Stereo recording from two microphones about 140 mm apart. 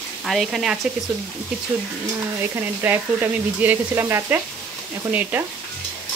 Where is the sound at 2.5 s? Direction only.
15° right (ahead or behind).